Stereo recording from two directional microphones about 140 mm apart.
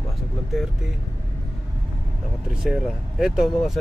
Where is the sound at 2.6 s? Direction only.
5° right (ahead or behind).